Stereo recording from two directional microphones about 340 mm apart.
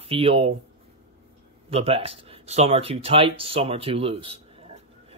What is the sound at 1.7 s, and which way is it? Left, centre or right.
Speech, centre.